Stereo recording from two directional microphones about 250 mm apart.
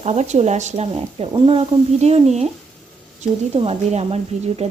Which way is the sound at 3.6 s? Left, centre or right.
Right.